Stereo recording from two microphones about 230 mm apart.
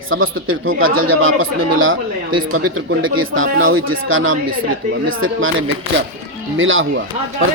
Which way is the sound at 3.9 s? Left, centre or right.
Right.